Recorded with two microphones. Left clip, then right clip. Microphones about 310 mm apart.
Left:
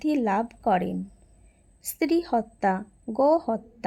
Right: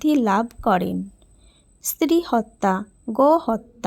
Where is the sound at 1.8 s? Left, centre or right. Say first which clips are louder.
Right 5 dB; right.